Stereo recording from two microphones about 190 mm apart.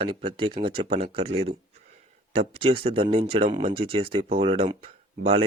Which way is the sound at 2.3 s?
30° right (ahead or behind).